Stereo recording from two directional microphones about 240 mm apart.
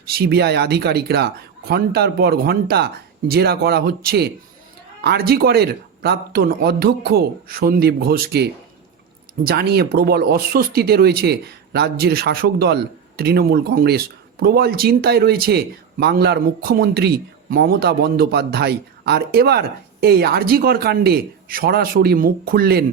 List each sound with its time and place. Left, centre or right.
0.1 s speech: right